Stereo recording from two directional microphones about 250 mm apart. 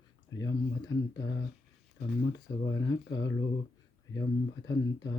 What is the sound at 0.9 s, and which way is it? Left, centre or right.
Speech, left.